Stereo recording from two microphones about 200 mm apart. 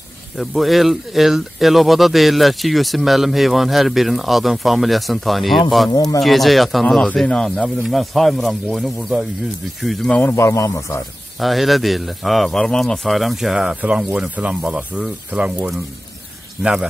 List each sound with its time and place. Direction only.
0.4 s speech: centre (ahead or behind)
5.9 s speech: 20° left (ahead or behind)
6.2 s a man's voice: centre (ahead or behind); by 11.0 s 15° left (ahead or behind)
11.3 s speech: centre (ahead or behind)